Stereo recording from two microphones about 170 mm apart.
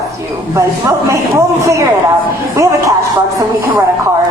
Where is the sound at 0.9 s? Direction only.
20° right (ahead or behind).